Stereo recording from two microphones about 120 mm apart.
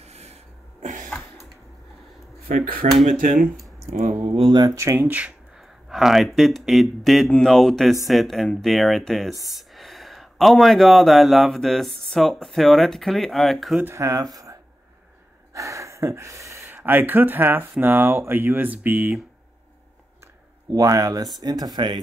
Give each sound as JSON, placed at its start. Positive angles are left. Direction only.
{"t": 0.0, "sound": "a sound", "side_deg": -60}
{"t": 2.9, "sound": "speech", "side_deg": 0}
{"t": 3.9, "sound": "speech", "side_deg": -90}
{"t": 4.2, "sound": "speech", "side_deg": -50}
{"t": 4.7, "sound": "speech", "side_deg": -20}
{"t": 5.9, "sound": "speech", "side_deg": -5}
{"t": 13.7, "sound": "speech", "side_deg": -20}
{"t": 20.7, "sound": "speech", "side_deg": -30}